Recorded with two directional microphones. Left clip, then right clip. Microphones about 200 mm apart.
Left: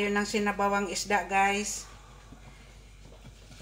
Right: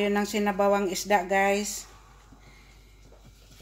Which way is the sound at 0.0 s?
50° right (ahead or behind).